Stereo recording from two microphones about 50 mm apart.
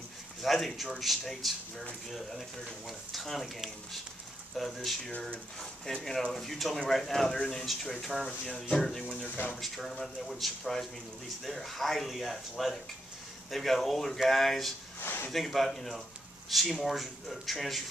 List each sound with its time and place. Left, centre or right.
0.4 s a man's voice: centre
5.9 s speech: centre
6.3 s a man's voice: centre
15.0 s a sound: left
15.3 s a man's voice: centre